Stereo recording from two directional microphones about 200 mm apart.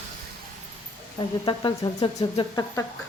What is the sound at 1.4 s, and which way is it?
Speech, 20° left (ahead or behind).